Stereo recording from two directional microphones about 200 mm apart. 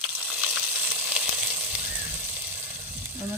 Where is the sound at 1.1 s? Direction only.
5° right (ahead or behind).